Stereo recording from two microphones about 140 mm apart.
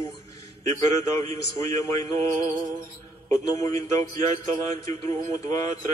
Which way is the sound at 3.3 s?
25° left (ahead or behind).